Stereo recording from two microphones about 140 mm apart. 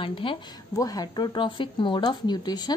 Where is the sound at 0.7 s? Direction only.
25° left (ahead or behind).